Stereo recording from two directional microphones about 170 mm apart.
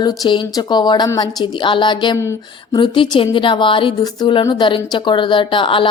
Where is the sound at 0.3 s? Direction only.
25° left (ahead or behind).